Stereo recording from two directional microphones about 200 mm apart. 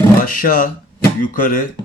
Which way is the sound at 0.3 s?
40° left (ahead or behind).